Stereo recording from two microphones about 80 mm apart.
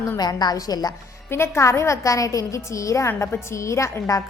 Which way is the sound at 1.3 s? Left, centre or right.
Left.